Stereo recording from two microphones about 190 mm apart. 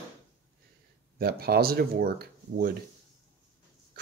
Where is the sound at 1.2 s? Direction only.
55° right (ahead or behind).